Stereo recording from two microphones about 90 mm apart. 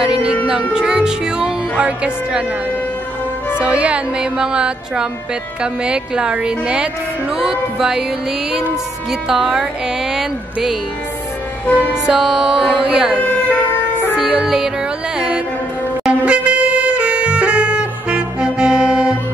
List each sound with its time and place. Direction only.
0.0 s music: 10° right (ahead or behind)
0.7 s speech: 10° right (ahead or behind)
3.5 s speech: 15° right (ahead or behind)
9.3 s a sound: 5° right (ahead or behind)
11.6 s music: 20° left (ahead or behind)
12.1 s speech: 5° right (ahead or behind)
14.1 s music: 10° right (ahead or behind)